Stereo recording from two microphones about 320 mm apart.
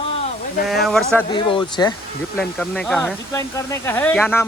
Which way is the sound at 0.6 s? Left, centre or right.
Centre.